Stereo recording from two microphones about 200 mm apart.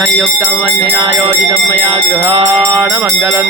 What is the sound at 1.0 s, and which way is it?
Music, 30° right (ahead or behind).